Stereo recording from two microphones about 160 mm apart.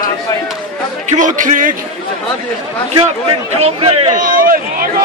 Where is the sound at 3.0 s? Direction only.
40° right (ahead or behind).